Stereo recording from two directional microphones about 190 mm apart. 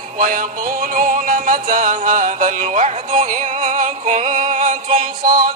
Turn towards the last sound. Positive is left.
turn(degrees=-20)  # may be behind; listen again after turning